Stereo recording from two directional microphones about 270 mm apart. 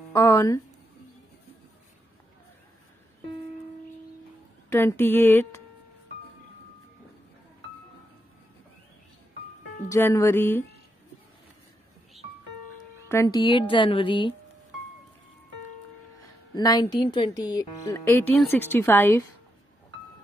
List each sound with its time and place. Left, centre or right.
0.1 s speech: centre
4.6 s speech: centre
9.8 s speech: centre
13.1 s speech: centre
16.5 s speech: centre